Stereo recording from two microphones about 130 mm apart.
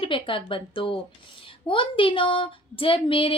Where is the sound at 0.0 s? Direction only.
40° left (ahead or behind).